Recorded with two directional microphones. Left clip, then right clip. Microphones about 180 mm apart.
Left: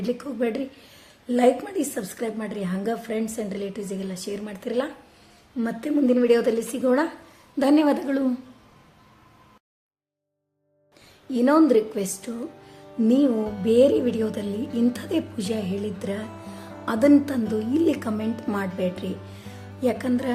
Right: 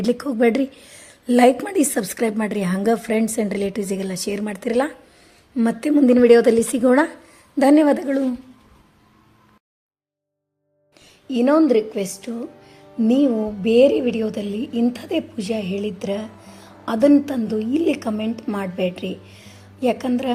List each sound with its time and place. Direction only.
0.0 s a woman's voice: 45° right (ahead or behind)
7.6 s a woman's voice: 30° right (ahead or behind)
11.3 s a woman's voice: 20° right (ahead or behind)